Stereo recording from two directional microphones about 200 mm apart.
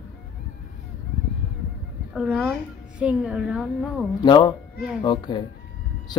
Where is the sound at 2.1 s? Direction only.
5° right (ahead or behind).